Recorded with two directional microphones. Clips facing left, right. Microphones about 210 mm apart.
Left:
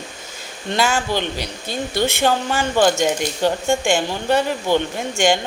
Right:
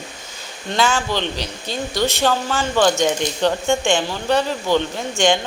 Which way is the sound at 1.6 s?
50° left (ahead or behind).